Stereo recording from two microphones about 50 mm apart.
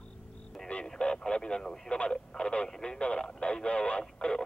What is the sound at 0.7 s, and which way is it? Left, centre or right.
Radio, centre.